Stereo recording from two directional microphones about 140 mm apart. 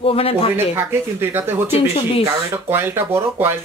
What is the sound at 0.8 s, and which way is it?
Speech, 15° right (ahead or behind).